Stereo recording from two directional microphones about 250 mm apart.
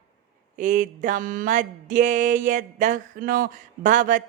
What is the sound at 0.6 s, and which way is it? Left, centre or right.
Mantra, right.